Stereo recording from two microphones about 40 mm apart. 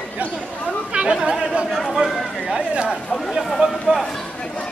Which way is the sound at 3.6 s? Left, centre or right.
Right.